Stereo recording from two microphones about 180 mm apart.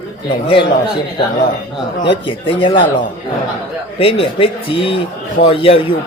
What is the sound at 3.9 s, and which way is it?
Speech, 30° left (ahead or behind).